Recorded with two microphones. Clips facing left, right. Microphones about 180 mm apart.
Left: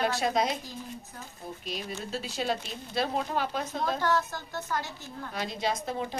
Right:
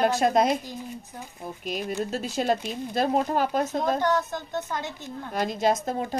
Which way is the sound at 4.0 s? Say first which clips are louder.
Right 3 dB; 20° right (ahead or behind).